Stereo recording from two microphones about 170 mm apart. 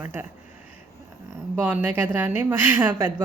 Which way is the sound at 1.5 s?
10° right (ahead or behind).